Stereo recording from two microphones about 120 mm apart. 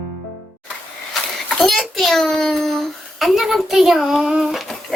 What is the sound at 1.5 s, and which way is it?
Child singing, centre (ahead or behind).